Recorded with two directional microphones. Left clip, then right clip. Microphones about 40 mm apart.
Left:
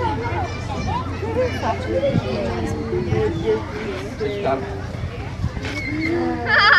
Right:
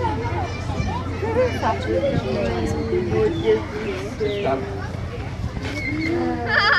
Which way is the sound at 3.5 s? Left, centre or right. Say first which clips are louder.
Right 2 dB; centre.